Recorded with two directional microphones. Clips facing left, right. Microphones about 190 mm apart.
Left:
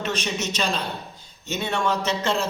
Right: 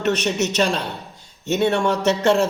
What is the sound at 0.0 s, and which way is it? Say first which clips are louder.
A man's voice: right 7 dB; 70° right (ahead or behind).